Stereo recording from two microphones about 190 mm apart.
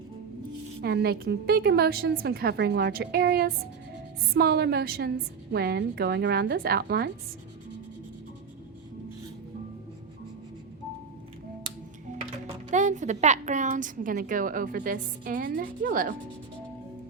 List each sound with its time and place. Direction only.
0.8 s a woman's voice: 60° right (ahead or behind)
12.7 s a woman's voice: 40° right (ahead or behind)